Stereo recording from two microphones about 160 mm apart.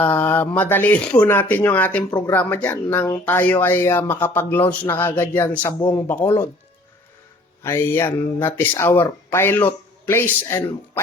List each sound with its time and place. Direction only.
0.0 s speech: 10° left (ahead or behind)
2.0 s speech: 25° left (ahead or behind)
2.3 s speech: 10° left (ahead or behind)
7.6 s speech: 15° left (ahead or behind)